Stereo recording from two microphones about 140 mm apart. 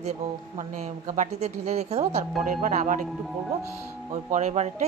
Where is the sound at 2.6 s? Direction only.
65° right (ahead or behind).